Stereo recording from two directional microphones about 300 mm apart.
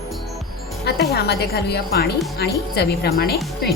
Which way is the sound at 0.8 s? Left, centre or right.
Left.